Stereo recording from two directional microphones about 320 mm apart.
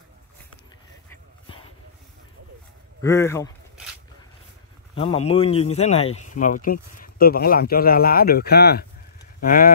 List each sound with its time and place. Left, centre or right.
3.0 s speech: centre
4.9 s speech: centre